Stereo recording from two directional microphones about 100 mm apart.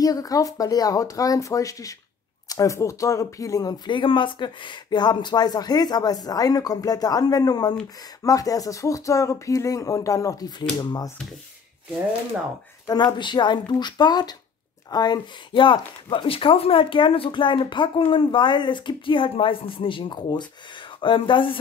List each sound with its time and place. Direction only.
0.0 s speech: 40° left (ahead or behind)
12.8 s speech: 45° left (ahead or behind)